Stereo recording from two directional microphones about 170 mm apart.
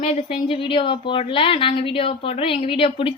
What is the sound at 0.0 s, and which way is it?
A woman's voice, 35° left (ahead or behind).